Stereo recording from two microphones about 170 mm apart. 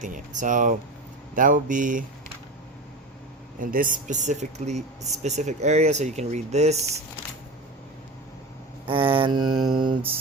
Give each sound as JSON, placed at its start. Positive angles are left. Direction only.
{"t": 0.0, "sound": "speech", "side_deg": -50}
{"t": 3.6, "sound": "speech", "side_deg": -55}
{"t": 8.9, "sound": "mantra", "side_deg": -30}